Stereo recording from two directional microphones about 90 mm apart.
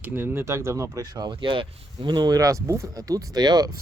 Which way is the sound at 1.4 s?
65° right (ahead or behind).